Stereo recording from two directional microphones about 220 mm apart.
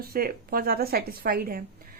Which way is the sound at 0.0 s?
45° right (ahead or behind).